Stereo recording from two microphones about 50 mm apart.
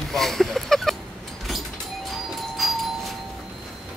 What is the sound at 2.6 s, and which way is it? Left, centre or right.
Doorbell, centre.